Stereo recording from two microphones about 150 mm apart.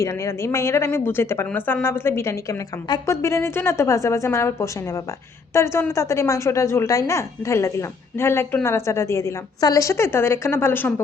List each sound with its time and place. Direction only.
0.0 s a woman's voice: 20° left (ahead or behind)